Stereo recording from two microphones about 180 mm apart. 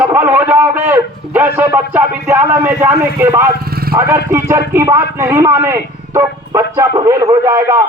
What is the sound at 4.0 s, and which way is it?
Speech, 15° right (ahead or behind).